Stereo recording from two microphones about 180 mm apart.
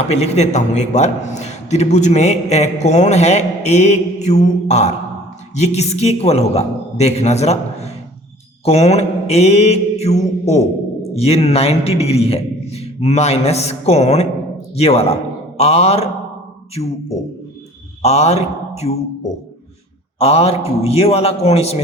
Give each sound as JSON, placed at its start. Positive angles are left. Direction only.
{"t": 0.1, "sound": "a man's voice", "side_deg": 35}
{"t": 8.6, "sound": "mantra", "side_deg": 35}
{"t": 11.1, "sound": "a man's voice", "side_deg": 35}
{"t": 18.0, "sound": "a man's voice", "side_deg": 35}
{"t": 20.1, "sound": "a man's voice", "side_deg": 35}